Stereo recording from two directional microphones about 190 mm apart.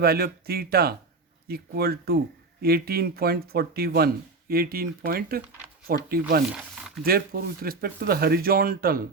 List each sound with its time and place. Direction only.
0.0 s speech: 55° right (ahead or behind)